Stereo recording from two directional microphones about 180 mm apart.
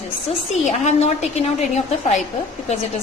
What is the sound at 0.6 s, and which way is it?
A woman's voice, 35° left (ahead or behind).